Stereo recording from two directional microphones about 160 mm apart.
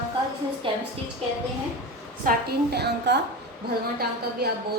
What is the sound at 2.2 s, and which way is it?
A woman's voice, 70° right (ahead or behind).